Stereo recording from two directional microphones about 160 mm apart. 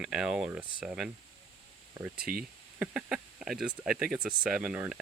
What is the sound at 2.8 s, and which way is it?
Speech, 5° right (ahead or behind).